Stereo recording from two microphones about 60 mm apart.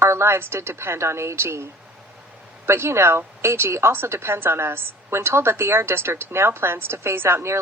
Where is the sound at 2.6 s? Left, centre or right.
Right.